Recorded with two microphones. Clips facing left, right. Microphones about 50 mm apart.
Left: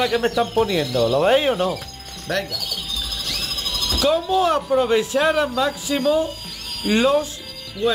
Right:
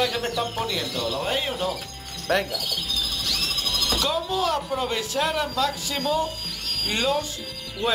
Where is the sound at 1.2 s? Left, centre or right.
Left.